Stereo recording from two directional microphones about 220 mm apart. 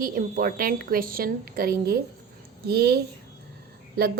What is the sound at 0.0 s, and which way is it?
A woman's voice, 40° right (ahead or behind).